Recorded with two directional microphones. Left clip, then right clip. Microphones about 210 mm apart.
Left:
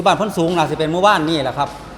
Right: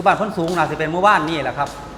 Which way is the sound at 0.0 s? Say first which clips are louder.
Left 1 dB; 45° left (ahead or behind).